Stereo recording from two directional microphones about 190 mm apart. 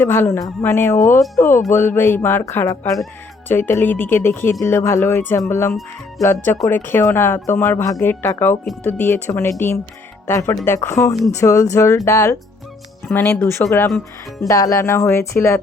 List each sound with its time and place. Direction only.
0.0 s speech: 15° left (ahead or behind)